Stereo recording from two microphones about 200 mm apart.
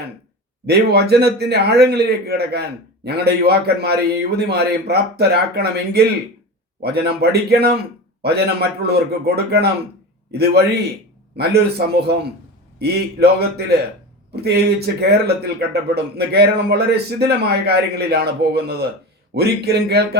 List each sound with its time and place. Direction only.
0.7 s a man's voice: 55° right (ahead or behind)